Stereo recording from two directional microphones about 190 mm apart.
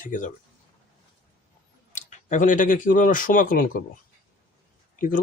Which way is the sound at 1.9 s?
40° left (ahead or behind).